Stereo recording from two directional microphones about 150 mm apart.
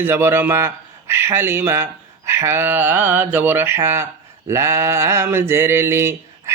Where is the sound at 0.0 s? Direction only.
15° right (ahead or behind).